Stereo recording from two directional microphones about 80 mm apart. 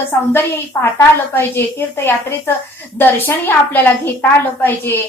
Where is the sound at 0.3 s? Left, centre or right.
Left.